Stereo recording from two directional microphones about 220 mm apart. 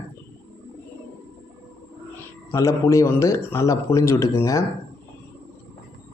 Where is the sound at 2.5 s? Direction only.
15° left (ahead or behind).